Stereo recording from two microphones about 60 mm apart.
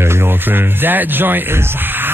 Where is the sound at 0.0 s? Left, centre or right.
Right.